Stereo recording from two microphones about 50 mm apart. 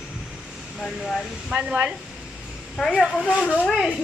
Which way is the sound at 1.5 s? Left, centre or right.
Right.